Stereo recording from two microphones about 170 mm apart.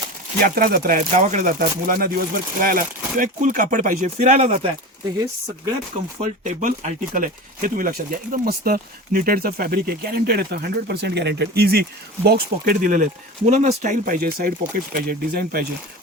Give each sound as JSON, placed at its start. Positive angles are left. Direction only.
{"t": 0.4, "sound": "speech", "side_deg": -60}
{"t": 6.1, "sound": "speech", "side_deg": -45}